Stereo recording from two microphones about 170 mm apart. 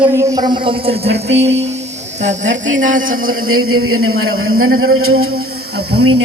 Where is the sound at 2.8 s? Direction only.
55° right (ahead or behind).